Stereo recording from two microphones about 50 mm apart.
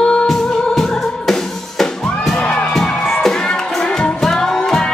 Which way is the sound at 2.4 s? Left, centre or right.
Left.